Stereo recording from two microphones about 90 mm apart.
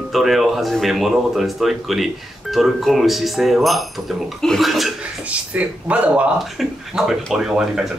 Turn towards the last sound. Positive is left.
turn(degrees=-5)  # may be behind; listen again after turning